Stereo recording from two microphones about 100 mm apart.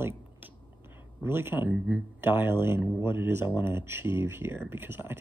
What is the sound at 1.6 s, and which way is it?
Speech, 10° right (ahead or behind).